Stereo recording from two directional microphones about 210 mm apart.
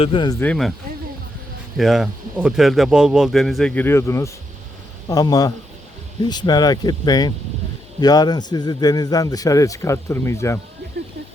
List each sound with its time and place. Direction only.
0.0 s speech: 25° left (ahead or behind)
0.3 s a man's voice: 5° left (ahead or behind)
1.8 s a man's voice: centre (ahead or behind)